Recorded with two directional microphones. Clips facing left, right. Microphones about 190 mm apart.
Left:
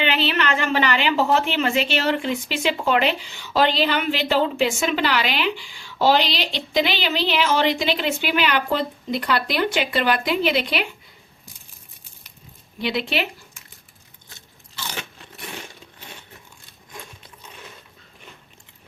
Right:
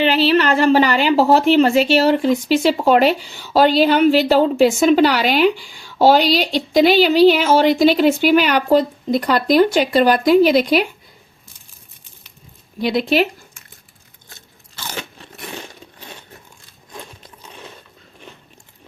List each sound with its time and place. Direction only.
0.0 s a woman's voice: 35° right (ahead or behind)
12.8 s speech: 40° right (ahead or behind)